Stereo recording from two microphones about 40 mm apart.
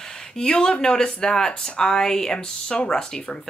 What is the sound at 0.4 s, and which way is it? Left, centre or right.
Speech, centre.